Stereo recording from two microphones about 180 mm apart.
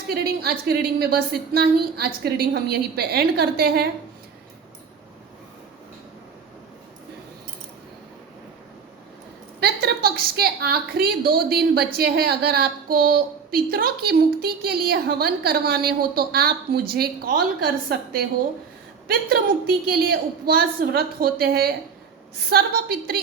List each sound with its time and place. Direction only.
0.1 s a woman's voice: 60° right (ahead or behind)
9.6 s a sound: 65° right (ahead or behind)
11.9 s a woman's voice: 60° right (ahead or behind)